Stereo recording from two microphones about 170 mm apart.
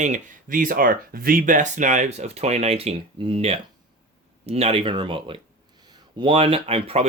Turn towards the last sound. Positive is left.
turn(degrees=-35)  # may be behind; listen again after turning